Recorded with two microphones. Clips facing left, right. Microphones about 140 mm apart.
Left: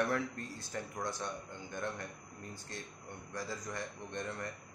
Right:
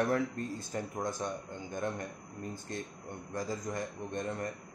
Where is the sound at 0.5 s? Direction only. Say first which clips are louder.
Right 5 dB; 45° right (ahead or behind).